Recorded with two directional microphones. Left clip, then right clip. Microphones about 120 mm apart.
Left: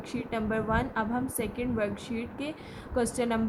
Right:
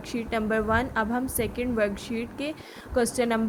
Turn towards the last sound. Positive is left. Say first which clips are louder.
# right 4 dB
turn(degrees=-40)  # may be behind; listen again after turning